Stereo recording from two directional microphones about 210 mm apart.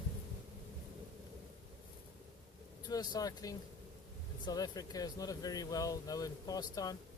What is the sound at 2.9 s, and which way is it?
Speech, 20° left (ahead or behind).